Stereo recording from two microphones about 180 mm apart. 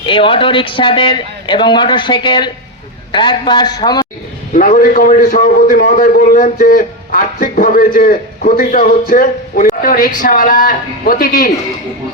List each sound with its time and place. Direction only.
0.0 s a man's voice: 30° left (ahead or behind)
4.5 s a man's voice: 50° left (ahead or behind)